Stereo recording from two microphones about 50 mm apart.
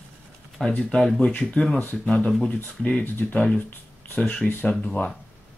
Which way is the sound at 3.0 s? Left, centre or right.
Left.